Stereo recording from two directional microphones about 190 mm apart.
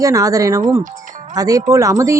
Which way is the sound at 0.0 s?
20° right (ahead or behind).